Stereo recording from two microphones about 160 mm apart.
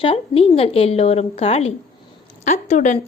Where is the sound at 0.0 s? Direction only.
35° left (ahead or behind).